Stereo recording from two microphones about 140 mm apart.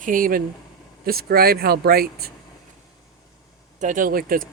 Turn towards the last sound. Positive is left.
turn(degrees=-90)